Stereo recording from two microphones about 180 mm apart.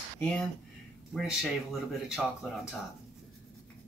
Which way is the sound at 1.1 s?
5° right (ahead or behind).